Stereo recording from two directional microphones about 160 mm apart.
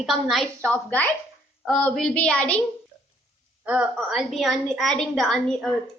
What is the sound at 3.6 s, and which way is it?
A woman's voice, 10° right (ahead or behind).